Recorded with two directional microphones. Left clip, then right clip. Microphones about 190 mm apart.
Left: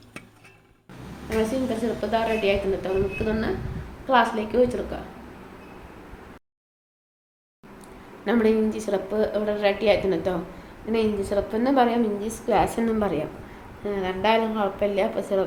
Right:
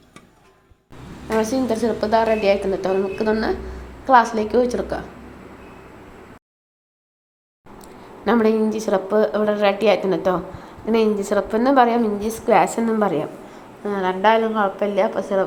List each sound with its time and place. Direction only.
2.0 s a woman's voice: 30° right (ahead or behind)
8.2 s a woman's voice: 20° right (ahead or behind); by 15.4 s 5° right (ahead or behind)